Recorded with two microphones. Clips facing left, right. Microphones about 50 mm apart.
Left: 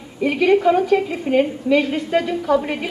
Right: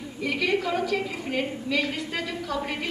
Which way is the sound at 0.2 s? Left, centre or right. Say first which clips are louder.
Left 10 dB; left.